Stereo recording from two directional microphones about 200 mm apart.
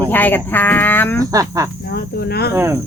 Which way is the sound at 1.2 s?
15° right (ahead or behind).